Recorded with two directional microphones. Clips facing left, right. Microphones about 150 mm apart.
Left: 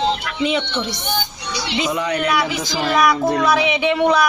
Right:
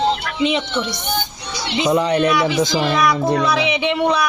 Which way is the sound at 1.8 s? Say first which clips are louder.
Right 6 dB; 30° right (ahead or behind).